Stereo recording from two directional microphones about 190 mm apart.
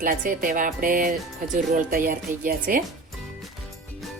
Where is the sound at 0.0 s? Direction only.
45° right (ahead or behind).